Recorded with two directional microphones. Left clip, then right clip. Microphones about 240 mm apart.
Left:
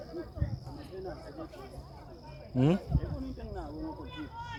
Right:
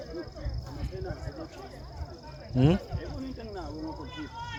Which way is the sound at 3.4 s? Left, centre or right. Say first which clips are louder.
Right 3 dB; right.